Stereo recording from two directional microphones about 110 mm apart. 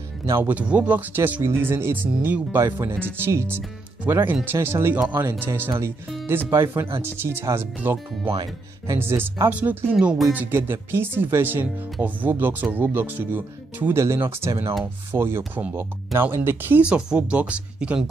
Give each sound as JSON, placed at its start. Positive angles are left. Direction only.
{"t": 0.3, "sound": "speech", "side_deg": -15}